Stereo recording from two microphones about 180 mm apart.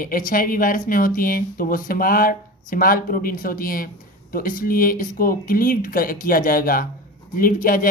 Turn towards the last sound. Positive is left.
turn(degrees=50)  # may be behind; listen again after turning